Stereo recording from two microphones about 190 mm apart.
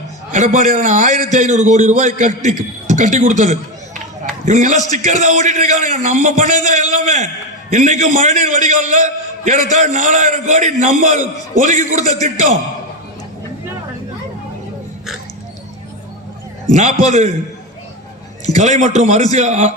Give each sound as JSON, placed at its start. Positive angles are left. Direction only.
{"t": 0.3, "sound": "a man's voice", "side_deg": -40}
{"t": 16.6, "sound": "a man's voice", "side_deg": -40}
{"t": 18.6, "sound": "a man's voice", "side_deg": -40}